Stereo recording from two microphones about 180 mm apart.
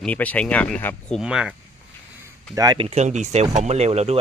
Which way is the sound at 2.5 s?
20° right (ahead or behind).